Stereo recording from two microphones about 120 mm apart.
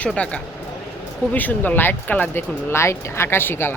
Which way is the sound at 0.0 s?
10° left (ahead or behind).